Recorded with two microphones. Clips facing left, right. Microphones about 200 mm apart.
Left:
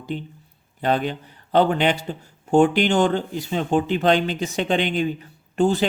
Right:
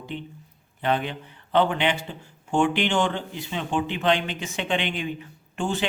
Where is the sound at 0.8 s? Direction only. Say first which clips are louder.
Left 3 dB; 40° left (ahead or behind).